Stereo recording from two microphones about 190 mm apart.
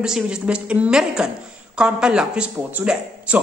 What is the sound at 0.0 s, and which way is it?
A woman's voice, 5° right (ahead or behind).